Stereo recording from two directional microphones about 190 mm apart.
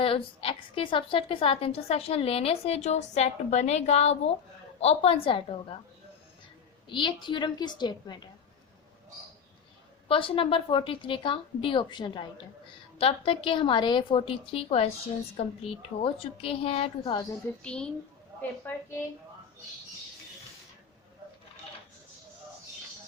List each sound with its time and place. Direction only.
0.0 s a woman's voice: 30° left (ahead or behind)
6.8 s a woman's voice: 25° left (ahead or behind)
10.1 s a woman's voice: 30° left (ahead or behind)
17.6 s a woman's voice: 5° left (ahead or behind)